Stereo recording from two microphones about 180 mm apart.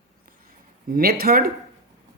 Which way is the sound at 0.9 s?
55° right (ahead or behind).